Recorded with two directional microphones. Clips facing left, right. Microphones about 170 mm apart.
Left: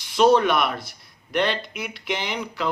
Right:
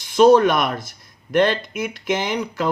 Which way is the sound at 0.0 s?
45° right (ahead or behind).